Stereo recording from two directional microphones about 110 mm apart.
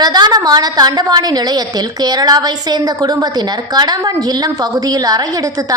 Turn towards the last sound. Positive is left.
turn(degrees=-30)  # may be behind; listen again after turning